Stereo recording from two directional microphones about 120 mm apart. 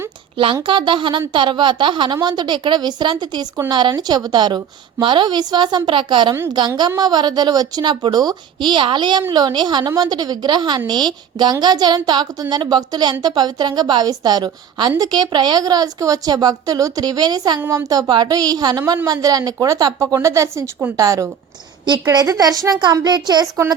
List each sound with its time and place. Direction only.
0.3 s a woman's voice: 45° right (ahead or behind)